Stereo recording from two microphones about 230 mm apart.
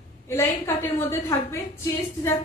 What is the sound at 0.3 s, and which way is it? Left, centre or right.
Speech, centre.